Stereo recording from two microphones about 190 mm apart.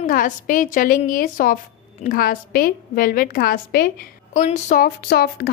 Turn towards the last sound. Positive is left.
turn(degrees=55)  # may be behind; listen again after turning